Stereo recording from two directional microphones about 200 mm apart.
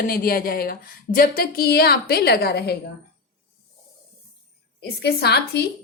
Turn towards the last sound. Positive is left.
turn(degrees=55)  # may be behind; listen again after turning